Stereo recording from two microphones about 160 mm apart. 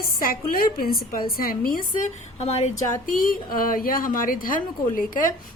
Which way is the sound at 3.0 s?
60° left (ahead or behind).